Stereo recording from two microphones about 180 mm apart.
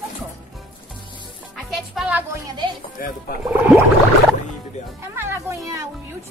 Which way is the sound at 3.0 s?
55° left (ahead or behind).